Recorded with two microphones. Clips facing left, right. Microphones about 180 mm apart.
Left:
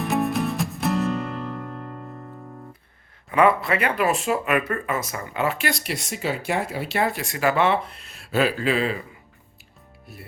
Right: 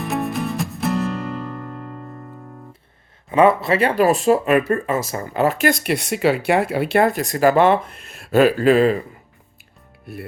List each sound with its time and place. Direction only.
0.0 s music: centre (ahead or behind)
3.2 s speech: 25° right (ahead or behind); by 9.0 s 45° right (ahead or behind)
10.1 s speech: 60° right (ahead or behind)